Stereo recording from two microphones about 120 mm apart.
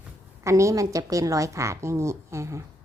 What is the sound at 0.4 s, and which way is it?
A woman's voice, 25° right (ahead or behind).